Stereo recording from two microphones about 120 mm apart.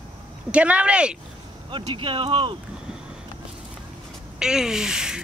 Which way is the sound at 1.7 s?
40° right (ahead or behind).